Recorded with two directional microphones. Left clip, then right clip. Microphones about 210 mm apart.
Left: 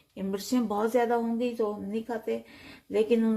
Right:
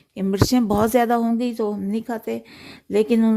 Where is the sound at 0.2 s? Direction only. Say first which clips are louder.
Right 10 dB; 45° right (ahead or behind).